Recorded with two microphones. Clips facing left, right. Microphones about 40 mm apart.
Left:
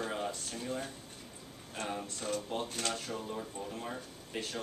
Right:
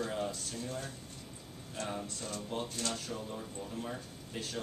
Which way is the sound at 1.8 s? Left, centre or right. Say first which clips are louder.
Left 1 dB; left.